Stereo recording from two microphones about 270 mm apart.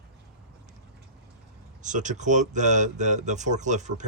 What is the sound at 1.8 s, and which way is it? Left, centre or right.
Speech, right.